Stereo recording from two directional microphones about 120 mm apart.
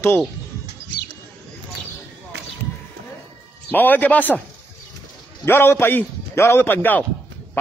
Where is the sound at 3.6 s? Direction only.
15° left (ahead or behind).